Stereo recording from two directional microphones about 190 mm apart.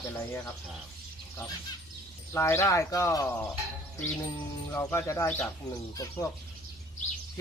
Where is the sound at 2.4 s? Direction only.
15° left (ahead or behind).